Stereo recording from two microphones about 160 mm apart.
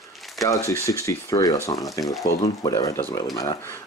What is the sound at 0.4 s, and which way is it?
Speech, 20° left (ahead or behind).